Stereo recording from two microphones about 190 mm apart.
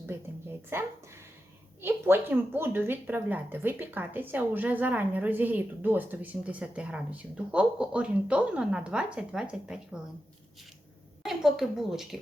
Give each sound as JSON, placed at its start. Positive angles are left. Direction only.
{"t": 0.7, "sound": "speech", "side_deg": -15}
{"t": 11.2, "sound": "a woman's voice", "side_deg": 0}